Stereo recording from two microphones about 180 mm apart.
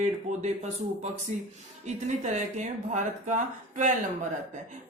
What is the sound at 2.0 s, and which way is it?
Speech, 40° right (ahead or behind).